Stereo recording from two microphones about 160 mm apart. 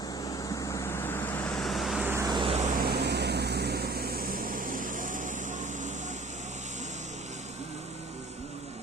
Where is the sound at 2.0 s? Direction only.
15° right (ahead or behind).